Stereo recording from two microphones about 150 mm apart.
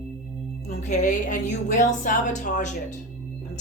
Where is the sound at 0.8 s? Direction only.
55° left (ahead or behind).